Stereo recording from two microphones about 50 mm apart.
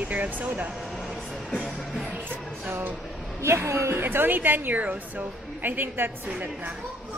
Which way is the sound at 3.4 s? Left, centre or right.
Right.